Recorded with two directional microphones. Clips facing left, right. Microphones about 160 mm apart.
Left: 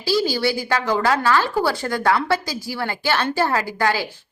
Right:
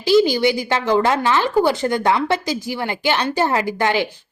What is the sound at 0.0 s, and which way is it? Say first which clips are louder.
A woman's voice: right 6 dB; 20° right (ahead or behind).